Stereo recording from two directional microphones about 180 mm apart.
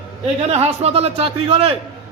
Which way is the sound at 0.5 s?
35° right (ahead or behind).